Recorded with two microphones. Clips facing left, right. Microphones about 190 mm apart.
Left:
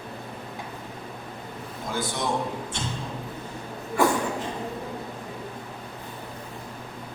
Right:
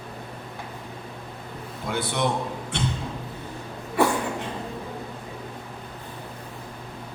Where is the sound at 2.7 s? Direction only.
65° right (ahead or behind).